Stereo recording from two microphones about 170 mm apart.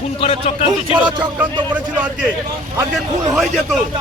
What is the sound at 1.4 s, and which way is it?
Speech, 10° right (ahead or behind).